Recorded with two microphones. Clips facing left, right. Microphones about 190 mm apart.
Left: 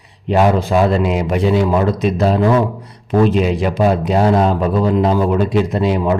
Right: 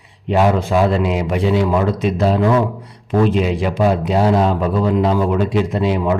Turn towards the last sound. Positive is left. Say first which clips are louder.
# left 2 dB
turn(degrees=40)  # may be behind; listen again after turning